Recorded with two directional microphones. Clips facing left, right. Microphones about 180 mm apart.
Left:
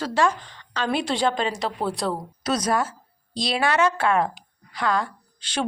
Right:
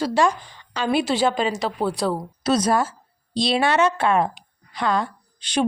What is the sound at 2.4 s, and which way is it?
A woman's voice, 30° right (ahead or behind).